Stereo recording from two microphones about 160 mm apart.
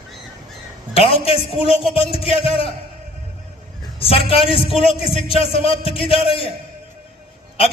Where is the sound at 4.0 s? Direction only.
35° left (ahead or behind).